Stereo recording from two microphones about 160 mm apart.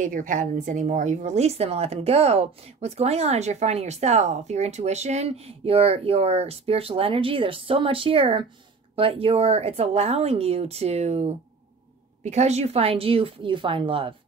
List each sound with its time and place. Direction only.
0.0 s a woman's voice: 55° right (ahead or behind); by 14.1 s 35° right (ahead or behind)